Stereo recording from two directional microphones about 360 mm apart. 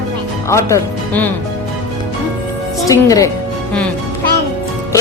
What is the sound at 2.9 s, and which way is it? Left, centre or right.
Speech, centre.